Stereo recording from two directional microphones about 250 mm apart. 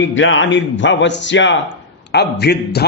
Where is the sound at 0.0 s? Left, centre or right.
Left.